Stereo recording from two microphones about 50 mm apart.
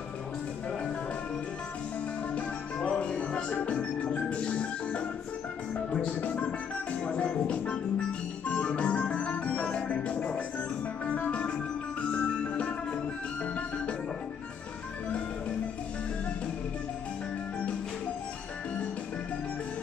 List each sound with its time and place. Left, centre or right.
2.9 s music: centre
8.5 s organ: left
9.8 s music: left